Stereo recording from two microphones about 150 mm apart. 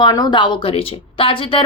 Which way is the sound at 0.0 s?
30° left (ahead or behind).